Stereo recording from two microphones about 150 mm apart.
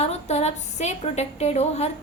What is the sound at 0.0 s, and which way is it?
A woman's voice, 45° left (ahead or behind).